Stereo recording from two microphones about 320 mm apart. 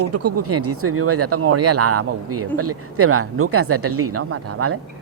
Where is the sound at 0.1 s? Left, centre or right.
Right.